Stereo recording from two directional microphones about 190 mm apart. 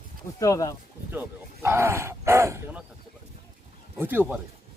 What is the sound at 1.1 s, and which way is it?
Speech, 10° right (ahead or behind).